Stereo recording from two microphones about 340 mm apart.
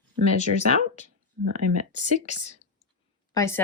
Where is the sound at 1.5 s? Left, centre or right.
Right.